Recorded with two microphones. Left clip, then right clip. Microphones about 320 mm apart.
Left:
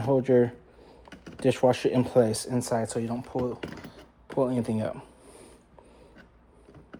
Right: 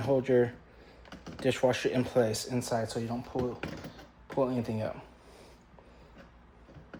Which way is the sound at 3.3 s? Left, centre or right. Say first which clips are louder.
Left 3 dB; left.